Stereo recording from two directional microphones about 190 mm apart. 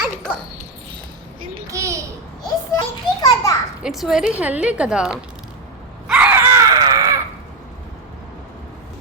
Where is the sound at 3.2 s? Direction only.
15° left (ahead or behind).